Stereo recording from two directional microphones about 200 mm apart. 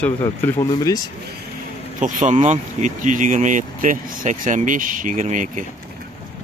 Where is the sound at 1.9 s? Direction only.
40° right (ahead or behind).